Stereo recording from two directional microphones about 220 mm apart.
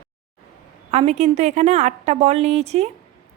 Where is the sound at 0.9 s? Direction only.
30° right (ahead or behind).